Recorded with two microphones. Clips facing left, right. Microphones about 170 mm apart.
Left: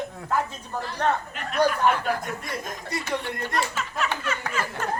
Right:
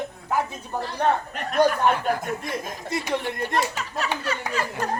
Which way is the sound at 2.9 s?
20° right (ahead or behind).